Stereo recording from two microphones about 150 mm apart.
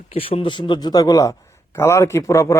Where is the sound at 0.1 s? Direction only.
40° left (ahead or behind).